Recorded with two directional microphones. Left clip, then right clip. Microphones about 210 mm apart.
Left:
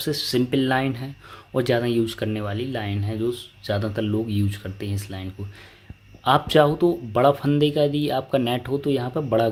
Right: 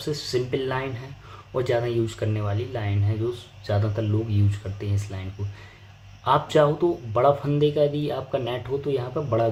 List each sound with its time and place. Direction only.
0.0 s speech: 45° left (ahead or behind)
6.2 s speech: 45° left (ahead or behind)